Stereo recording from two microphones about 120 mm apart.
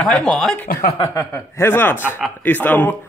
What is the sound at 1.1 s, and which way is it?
Speech, 25° left (ahead or behind).